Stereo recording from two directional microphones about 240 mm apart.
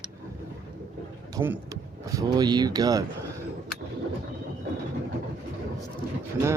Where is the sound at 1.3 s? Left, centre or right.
Centre.